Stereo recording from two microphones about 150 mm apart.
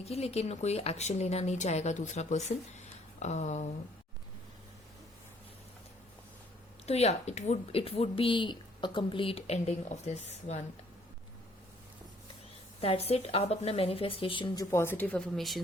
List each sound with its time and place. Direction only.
0.0 s speech: 45° left (ahead or behind)
6.8 s speech: 45° left (ahead or behind)
12.8 s speech: 40° left (ahead or behind); by 15.2 s 10° left (ahead or behind)
15.4 s speech: centre (ahead or behind)